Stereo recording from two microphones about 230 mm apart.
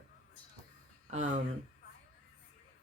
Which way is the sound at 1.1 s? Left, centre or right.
Right.